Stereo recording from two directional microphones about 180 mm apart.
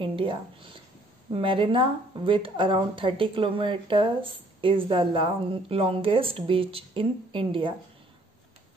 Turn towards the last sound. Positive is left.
turn(degrees=-30)  # may be behind; listen again after turning